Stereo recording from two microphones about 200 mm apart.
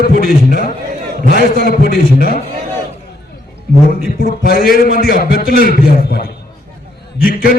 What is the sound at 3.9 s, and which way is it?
A man's voice, 45° left (ahead or behind).